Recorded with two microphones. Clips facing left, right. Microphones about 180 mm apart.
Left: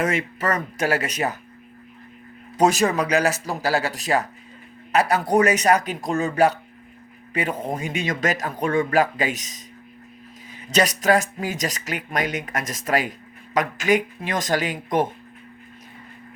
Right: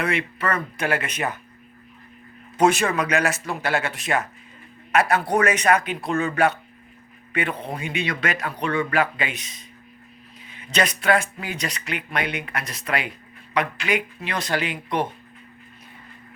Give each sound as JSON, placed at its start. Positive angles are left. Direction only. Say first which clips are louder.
{"t": 0.0, "sound": "speech", "louder": "left 2 dB", "side_deg": 45}
{"t": 2.6, "sound": "speech", "louder": "left 1 dB", "side_deg": 35}